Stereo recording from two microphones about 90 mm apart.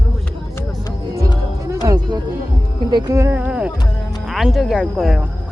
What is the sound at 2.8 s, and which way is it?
Music, 60° right (ahead or behind).